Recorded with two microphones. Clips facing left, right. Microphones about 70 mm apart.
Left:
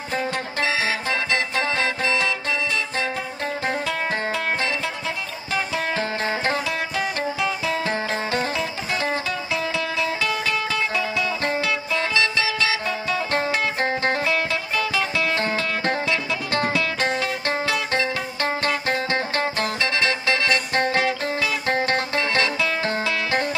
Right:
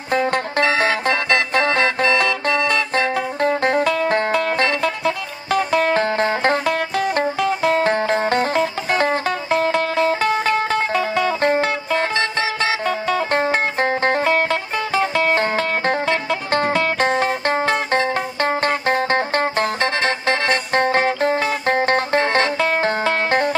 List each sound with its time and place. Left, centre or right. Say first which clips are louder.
0.1 s music: right 8 dB; right